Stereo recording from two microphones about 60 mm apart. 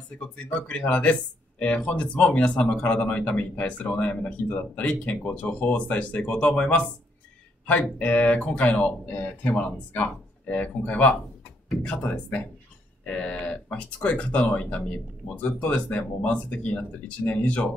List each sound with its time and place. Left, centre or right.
0.2 s speech: left